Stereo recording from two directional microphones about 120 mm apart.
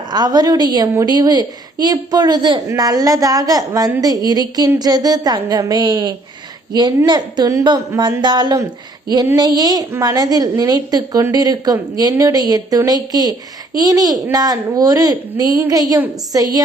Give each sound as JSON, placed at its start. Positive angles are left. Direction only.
{"t": 0.1, "sound": "a woman's voice", "side_deg": -35}